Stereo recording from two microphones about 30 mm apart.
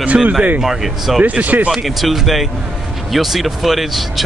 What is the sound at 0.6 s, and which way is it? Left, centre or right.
Speech, centre.